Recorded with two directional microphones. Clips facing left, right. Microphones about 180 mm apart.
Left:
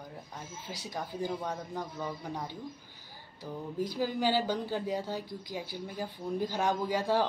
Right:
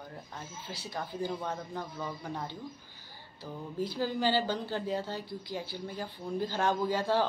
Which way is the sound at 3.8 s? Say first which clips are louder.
Even; 15° left (ahead or behind).